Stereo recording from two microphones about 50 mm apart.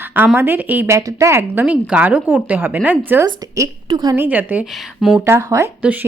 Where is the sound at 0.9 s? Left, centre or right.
Right.